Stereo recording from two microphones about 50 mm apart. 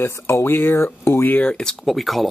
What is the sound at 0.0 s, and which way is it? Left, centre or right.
Speech, left.